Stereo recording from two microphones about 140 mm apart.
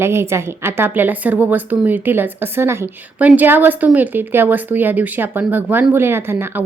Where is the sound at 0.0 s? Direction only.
20° right (ahead or behind).